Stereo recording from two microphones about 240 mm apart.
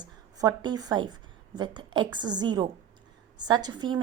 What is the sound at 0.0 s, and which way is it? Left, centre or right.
A woman's voice, centre.